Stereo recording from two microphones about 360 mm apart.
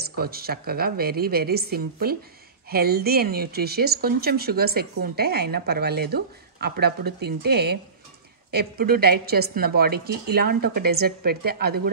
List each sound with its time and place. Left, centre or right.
0.2 s speech: right